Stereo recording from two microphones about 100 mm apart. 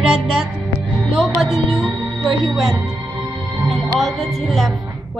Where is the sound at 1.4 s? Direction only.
5° right (ahead or behind).